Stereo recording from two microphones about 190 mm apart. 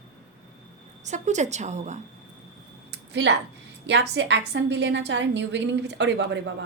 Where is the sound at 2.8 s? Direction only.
65° right (ahead or behind).